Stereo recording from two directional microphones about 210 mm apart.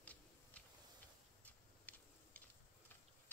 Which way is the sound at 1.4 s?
5° left (ahead or behind).